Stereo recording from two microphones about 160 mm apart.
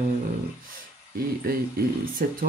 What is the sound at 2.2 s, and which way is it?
Speech, 65° right (ahead or behind).